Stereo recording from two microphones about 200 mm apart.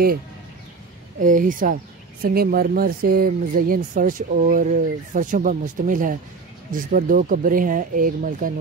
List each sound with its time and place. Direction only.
1.2 s speech: 40° right (ahead or behind)